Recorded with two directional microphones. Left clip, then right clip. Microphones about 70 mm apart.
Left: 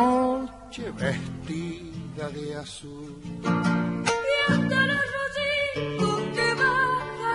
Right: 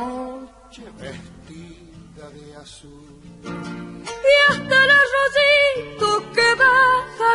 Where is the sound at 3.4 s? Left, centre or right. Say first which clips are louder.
Left 6 dB; right.